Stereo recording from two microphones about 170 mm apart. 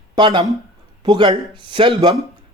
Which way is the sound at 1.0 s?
25° right (ahead or behind).